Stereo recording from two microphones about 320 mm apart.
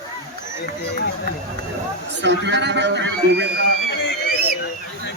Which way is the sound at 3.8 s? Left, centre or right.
Left.